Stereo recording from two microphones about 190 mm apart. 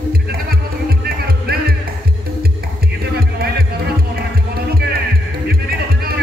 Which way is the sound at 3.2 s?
55° right (ahead or behind).